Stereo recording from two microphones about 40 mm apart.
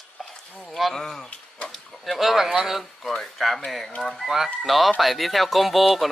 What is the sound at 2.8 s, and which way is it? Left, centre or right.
Speech, centre.